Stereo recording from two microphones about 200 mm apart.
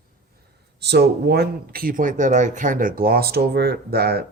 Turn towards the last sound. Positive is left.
turn(degrees=-50)  # may be behind; listen again after turning